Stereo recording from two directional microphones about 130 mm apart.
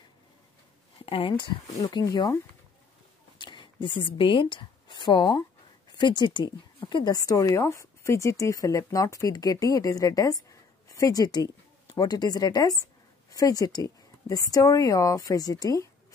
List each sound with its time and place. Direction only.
1.0 s speech: 45° left (ahead or behind)
1.8 s a woman's voice: 30° left (ahead or behind)